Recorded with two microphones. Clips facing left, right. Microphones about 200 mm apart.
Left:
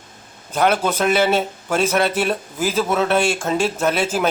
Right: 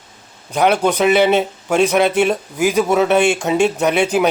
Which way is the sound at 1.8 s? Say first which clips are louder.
Right 5 dB; 15° right (ahead or behind).